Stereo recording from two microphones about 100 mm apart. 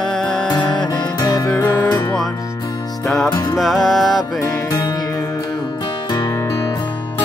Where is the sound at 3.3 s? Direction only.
45° left (ahead or behind).